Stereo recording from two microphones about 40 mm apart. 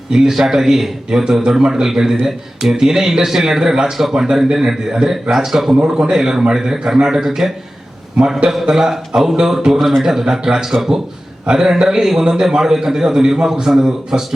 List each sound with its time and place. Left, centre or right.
0.1 s a man's voice: centre
5.7 s a man's voice: right
8.6 s a man's voice: centre